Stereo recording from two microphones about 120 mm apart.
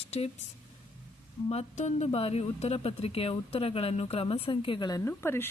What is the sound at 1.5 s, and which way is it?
Speech, 65° left (ahead or behind).